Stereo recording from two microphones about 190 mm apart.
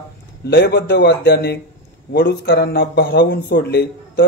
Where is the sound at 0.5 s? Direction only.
60° left (ahead or behind).